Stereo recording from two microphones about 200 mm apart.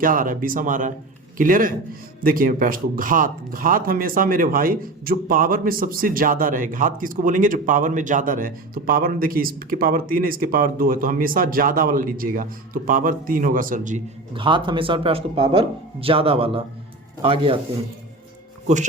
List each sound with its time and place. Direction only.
0.0 s a man's voice: 45° right (ahead or behind)
14.3 s speech: 25° right (ahead or behind)